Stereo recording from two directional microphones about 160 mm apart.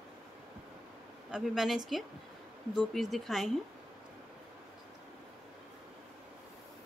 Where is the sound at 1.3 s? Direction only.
5° right (ahead or behind).